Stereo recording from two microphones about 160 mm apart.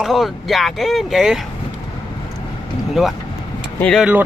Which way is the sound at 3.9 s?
10° right (ahead or behind).